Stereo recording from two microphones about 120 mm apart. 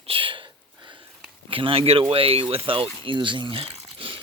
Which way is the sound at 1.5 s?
50° right (ahead or behind).